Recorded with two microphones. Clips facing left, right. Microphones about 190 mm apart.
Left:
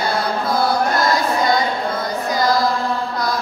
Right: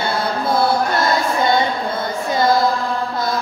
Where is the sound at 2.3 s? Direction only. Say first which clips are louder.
Right 2 dB; 25° right (ahead or behind).